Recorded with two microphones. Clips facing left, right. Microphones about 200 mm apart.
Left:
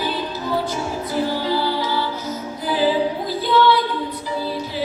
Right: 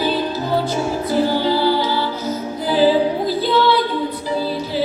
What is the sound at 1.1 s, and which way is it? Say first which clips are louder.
Music: right 4 dB; 30° right (ahead or behind).